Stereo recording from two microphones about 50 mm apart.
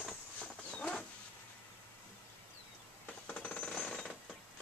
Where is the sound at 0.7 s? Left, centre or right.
Centre.